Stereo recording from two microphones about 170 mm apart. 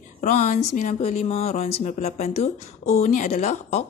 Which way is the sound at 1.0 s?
40° left (ahead or behind).